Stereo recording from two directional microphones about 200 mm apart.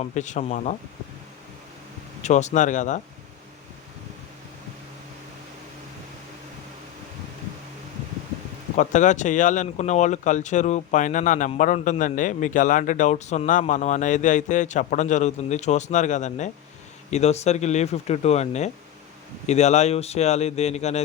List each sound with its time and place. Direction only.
0.0 s speech: 35° left (ahead or behind)
2.2 s speech: 35° left (ahead or behind)
8.7 s speech: 40° left (ahead or behind)